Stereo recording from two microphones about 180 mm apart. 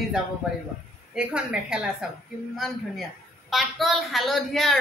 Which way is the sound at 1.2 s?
5° right (ahead or behind).